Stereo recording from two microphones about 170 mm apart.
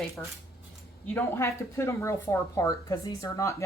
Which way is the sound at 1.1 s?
15° left (ahead or behind).